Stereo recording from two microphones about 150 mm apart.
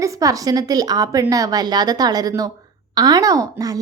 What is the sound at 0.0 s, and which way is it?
A woman's voice, 20° right (ahead or behind).